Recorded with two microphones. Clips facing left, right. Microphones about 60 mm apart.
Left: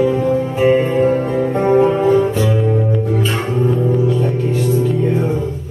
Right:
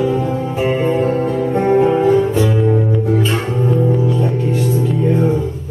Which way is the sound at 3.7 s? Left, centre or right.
Centre.